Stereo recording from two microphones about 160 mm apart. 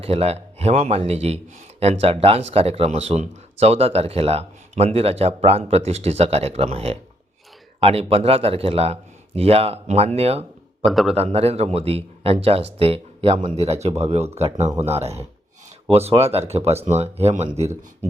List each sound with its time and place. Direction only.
0.0 s a man's voice: 40° right (ahead or behind)
10.8 s a man's voice: centre (ahead or behind)
11.1 s a man's voice: 40° right (ahead or behind)